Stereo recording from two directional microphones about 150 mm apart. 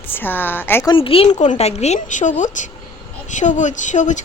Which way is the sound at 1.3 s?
55° left (ahead or behind).